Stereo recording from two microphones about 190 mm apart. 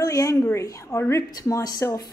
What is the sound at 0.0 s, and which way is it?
A woman's voice, 20° left (ahead or behind).